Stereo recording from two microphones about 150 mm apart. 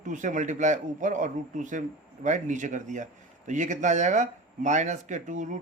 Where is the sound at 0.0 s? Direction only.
55° right (ahead or behind).